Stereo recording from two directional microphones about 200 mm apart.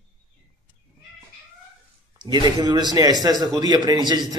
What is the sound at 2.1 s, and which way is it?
A man's voice, 20° right (ahead or behind).